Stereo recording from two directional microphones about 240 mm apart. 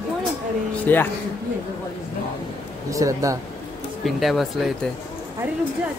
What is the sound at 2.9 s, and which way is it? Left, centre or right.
Speech, centre.